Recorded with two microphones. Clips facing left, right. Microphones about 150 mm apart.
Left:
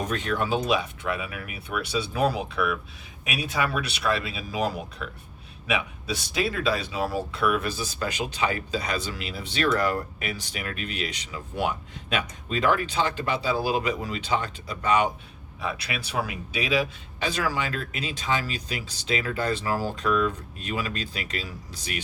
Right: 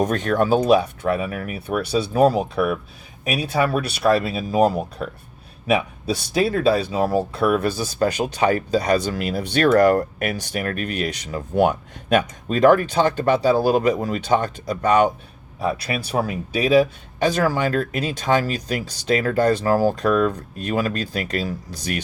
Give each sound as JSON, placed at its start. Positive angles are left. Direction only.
{"t": 0.0, "sound": "speech", "side_deg": -50}
{"t": 3.5, "sound": "speech", "side_deg": -35}
{"t": 6.3, "sound": "speech", "side_deg": -40}
{"t": 7.4, "sound": "speech", "side_deg": -35}